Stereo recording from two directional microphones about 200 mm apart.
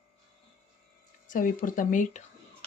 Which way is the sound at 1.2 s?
40° left (ahead or behind).